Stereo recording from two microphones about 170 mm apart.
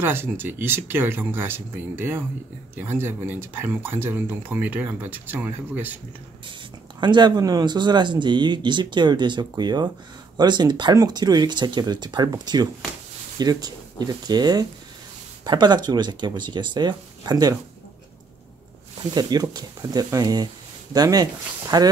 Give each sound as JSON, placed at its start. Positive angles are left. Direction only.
{"t": 0.0, "sound": "speech", "side_deg": -10}
{"t": 7.0, "sound": "speech", "side_deg": -25}
{"t": 19.1, "sound": "speech", "side_deg": -25}